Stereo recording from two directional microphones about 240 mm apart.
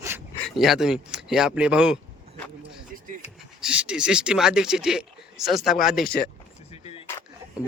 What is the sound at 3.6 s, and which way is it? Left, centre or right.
Speech, centre.